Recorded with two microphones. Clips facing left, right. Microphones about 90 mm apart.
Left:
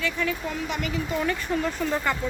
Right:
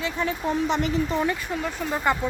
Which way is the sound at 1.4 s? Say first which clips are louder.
Left 2 dB; 5° right (ahead or behind).